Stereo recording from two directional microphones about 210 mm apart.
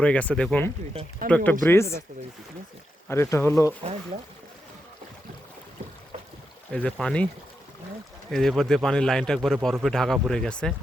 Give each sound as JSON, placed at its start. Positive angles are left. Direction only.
{"t": 0.0, "sound": "speech", "side_deg": 5}
{"t": 1.2, "sound": "speech", "side_deg": -40}
{"t": 1.6, "sound": "speech", "side_deg": 10}
{"t": 3.1, "sound": "speech", "side_deg": 15}
{"t": 6.7, "sound": "speech", "side_deg": 5}
{"t": 8.3, "sound": "speech", "side_deg": 0}